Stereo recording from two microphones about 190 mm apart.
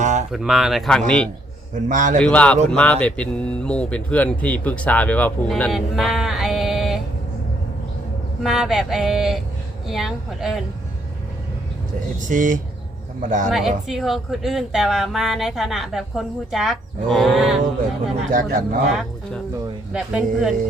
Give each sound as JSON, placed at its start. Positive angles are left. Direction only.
{"t": 0.0, "sound": "a sound", "side_deg": -40}
{"t": 0.3, "sound": "speech", "side_deg": 0}
{"t": 1.7, "sound": "speech", "side_deg": -40}
{"t": 2.1, "sound": "speech", "side_deg": 5}
{"t": 8.4, "sound": "speech", "side_deg": 0}
{"t": 12.3, "sound": "speech", "side_deg": -45}
{"t": 13.5, "sound": "speech", "side_deg": 0}
{"t": 18.3, "sound": "speech", "side_deg": -45}
{"t": 18.9, "sound": "speech", "side_deg": 0}